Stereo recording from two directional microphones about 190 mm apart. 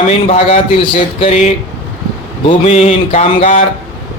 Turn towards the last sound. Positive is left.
turn(degrees=35)  # may be behind; listen again after turning